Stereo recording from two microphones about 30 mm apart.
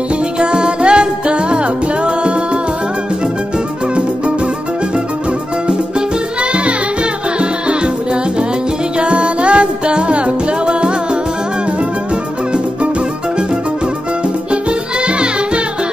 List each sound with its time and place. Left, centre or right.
0.4 s music: right
7.3 s music: right
15.0 s music: right